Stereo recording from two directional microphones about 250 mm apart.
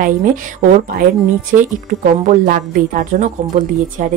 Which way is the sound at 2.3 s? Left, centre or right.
Right.